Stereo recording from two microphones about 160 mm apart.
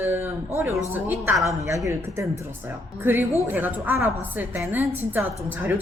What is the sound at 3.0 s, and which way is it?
A woman's voice, 15° right (ahead or behind).